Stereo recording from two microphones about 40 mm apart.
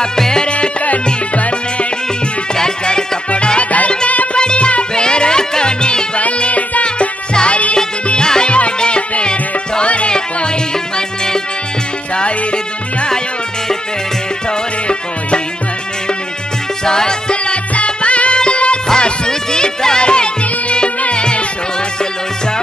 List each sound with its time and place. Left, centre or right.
0.2 s music: centre
0.5 s music: left
2.5 s music: centre
3.3 s music: left
4.4 s music: left
6.2 s music: left; by 11.4 s centre
16.8 s music: centre